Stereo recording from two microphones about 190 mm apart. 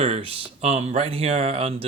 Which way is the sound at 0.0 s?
30° right (ahead or behind).